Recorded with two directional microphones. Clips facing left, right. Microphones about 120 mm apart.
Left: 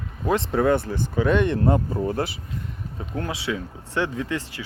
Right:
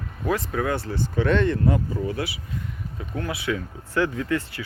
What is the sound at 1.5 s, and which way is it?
Speech, 35° left (ahead or behind).